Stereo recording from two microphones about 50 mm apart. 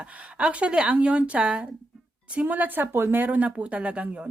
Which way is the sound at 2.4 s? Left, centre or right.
Right.